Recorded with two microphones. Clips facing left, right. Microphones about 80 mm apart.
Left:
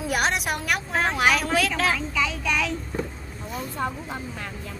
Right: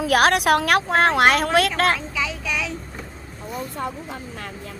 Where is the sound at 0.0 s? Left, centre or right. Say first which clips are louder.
Right 7 dB; right.